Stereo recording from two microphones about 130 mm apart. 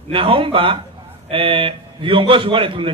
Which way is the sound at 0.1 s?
40° right (ahead or behind).